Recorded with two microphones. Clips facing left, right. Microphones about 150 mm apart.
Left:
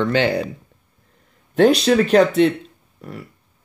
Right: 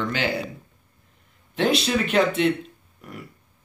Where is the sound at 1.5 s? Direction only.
40° left (ahead or behind).